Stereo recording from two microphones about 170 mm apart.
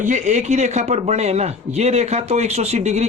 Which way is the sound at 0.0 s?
45° right (ahead or behind).